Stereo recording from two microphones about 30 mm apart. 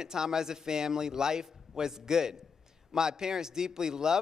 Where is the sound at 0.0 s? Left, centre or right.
Centre.